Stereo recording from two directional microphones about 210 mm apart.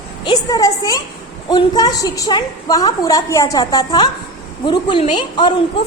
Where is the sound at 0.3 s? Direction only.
20° left (ahead or behind).